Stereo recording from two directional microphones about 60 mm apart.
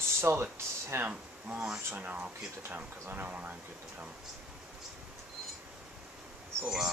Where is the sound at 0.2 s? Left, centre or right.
Right.